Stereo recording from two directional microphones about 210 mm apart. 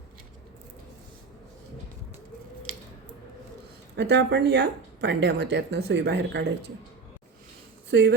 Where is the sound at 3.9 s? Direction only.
55° right (ahead or behind).